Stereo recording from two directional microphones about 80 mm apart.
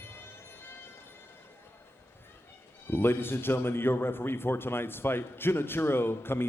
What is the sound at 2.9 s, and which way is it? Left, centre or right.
A man's voice, left.